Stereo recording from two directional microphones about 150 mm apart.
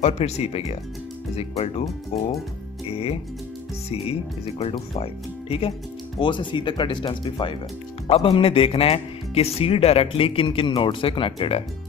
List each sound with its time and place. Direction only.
0.0 s speech: 45° left (ahead or behind)